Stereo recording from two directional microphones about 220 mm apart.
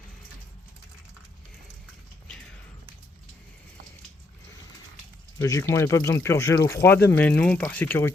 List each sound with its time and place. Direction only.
5.4 s speech: 15° left (ahead or behind)